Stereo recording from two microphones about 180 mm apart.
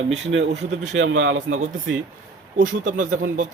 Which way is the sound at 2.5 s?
45° right (ahead or behind).